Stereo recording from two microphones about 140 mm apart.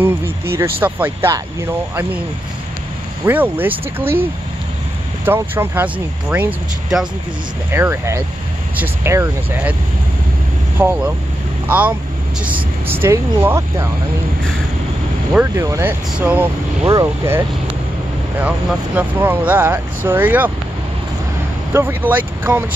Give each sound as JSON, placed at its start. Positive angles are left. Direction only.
{"t": 0.0, "sound": "speech", "side_deg": -15}
{"t": 3.3, "sound": "speech", "side_deg": -15}
{"t": 7.7, "sound": "speech", "side_deg": -15}
{"t": 10.8, "sound": "speech", "side_deg": -15}
{"t": 15.5, "sound": "speech", "side_deg": -20}
{"t": 16.9, "sound": "speech", "side_deg": -20}
{"t": 21.7, "sound": "speech", "side_deg": -15}